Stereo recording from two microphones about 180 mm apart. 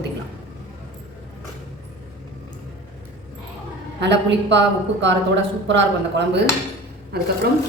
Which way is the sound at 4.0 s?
75° right (ahead or behind).